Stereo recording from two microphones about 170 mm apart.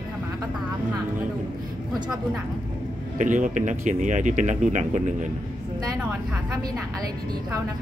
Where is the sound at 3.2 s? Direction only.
50° right (ahead or behind).